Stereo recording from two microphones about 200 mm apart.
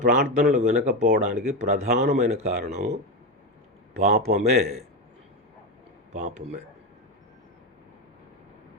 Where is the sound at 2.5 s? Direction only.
50° right (ahead or behind).